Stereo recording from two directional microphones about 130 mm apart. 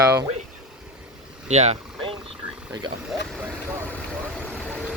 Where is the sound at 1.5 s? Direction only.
55° right (ahead or behind).